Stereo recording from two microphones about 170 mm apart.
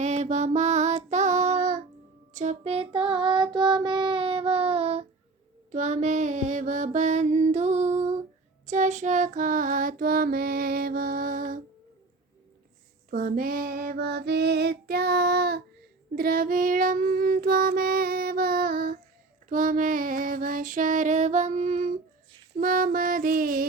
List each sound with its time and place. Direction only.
0.0 s child singing: 40° right (ahead or behind)
5.7 s music: 45° right (ahead or behind)
8.6 s child singing: 45° right (ahead or behind)
13.1 s female singing: 55° right (ahead or behind); by 15.6 s 70° right (ahead or behind)
16.1 s child singing: 60° right (ahead or behind)
22.5 s mantra: 55° right (ahead or behind)